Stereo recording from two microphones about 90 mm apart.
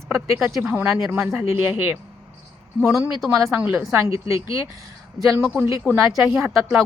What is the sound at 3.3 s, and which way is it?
Speech, 30° right (ahead or behind).